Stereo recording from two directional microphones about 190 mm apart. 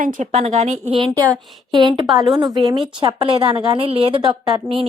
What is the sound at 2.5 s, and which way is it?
A woman's voice, 20° right (ahead or behind).